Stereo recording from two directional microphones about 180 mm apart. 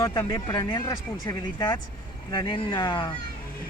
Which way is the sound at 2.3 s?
25° left (ahead or behind).